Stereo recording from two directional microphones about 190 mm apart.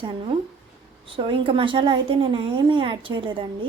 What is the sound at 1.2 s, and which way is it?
Speech, 25° right (ahead or behind).